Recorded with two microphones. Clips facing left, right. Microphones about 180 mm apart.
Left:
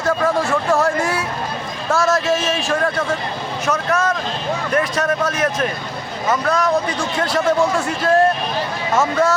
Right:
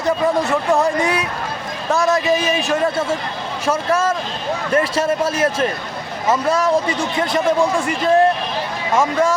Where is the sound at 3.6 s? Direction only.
30° right (ahead or behind).